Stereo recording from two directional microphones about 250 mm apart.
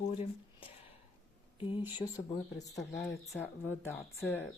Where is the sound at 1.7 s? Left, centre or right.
Centre.